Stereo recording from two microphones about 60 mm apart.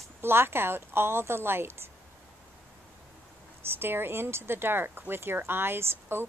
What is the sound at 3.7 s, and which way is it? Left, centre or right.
Speech, right.